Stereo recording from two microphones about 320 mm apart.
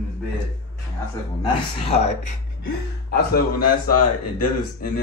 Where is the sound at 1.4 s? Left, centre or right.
Centre.